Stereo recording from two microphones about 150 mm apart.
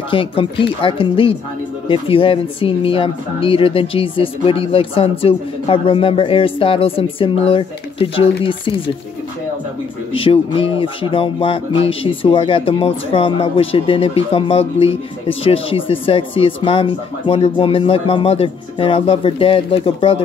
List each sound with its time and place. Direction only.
0.1 s speech: 35° left (ahead or behind)
10.1 s speech: 35° left (ahead or behind)